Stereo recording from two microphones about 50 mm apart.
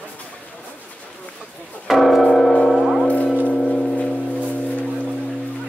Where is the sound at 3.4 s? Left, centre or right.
Left.